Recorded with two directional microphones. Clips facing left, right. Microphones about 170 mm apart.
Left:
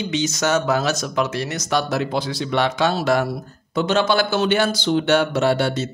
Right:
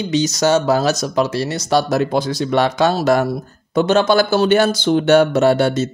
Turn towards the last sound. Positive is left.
turn(degrees=-45)  # may be behind; listen again after turning